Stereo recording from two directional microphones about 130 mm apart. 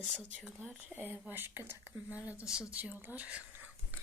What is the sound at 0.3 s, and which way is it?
Speech, 10° right (ahead or behind).